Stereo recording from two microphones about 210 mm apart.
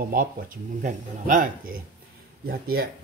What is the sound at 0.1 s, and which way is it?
Speech, 40° right (ahead or behind).